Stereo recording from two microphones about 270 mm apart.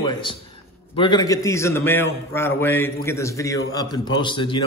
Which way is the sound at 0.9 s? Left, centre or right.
Centre.